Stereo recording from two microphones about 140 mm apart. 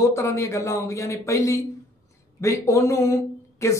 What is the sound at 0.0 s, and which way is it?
Speech, 20° left (ahead or behind).